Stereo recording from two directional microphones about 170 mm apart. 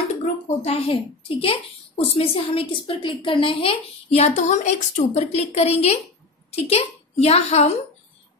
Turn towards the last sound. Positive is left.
turn(degrees=40)  # may be behind; listen again after turning